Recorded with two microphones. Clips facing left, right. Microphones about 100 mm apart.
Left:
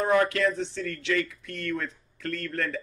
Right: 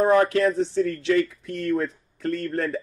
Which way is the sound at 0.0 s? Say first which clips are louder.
Right 5 dB; 35° right (ahead or behind).